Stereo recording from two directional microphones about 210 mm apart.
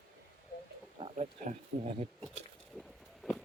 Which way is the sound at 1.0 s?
30° right (ahead or behind).